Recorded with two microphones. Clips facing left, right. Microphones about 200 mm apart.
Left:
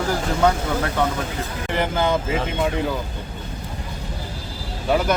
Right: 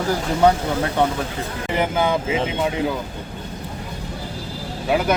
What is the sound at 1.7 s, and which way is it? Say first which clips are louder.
Speech: right 1 dB; 10° right (ahead or behind).